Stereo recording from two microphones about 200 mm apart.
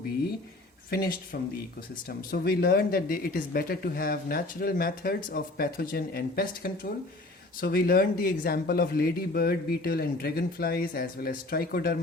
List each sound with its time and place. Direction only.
0.9 s speech: 45° left (ahead or behind)